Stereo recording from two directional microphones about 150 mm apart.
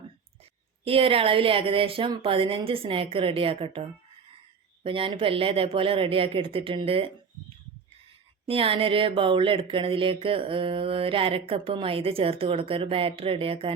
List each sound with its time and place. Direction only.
0.9 s speech: 40° right (ahead or behind)
8.4 s speech: 40° right (ahead or behind)